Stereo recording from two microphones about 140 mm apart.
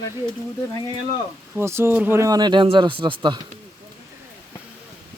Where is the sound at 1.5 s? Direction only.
15° right (ahead or behind); by 3.4 s 35° right (ahead or behind).